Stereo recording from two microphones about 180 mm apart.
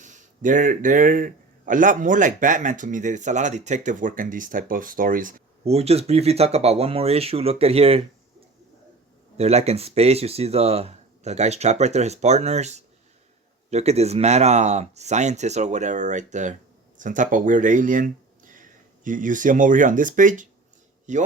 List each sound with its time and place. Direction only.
0.0 s a man's voice: 45° right (ahead or behind)
5.6 s speech: 35° right (ahead or behind)
9.4 s a man's voice: 35° right (ahead or behind)